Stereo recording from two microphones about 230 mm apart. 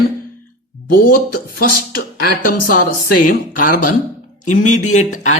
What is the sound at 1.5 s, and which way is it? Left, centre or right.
Speech, left.